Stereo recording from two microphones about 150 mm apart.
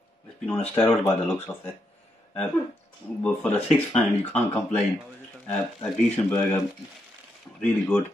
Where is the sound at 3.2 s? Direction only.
10° left (ahead or behind).